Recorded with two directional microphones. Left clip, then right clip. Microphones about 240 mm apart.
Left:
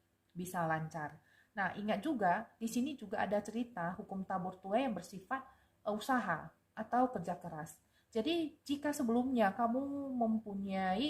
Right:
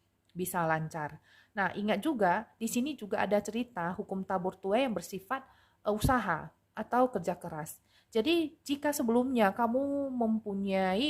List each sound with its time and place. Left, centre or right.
0.3 s speech: right